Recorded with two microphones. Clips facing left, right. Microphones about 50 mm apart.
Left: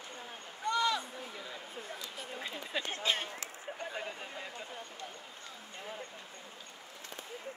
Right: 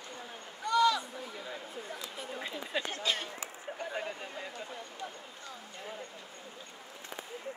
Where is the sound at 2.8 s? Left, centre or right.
Left.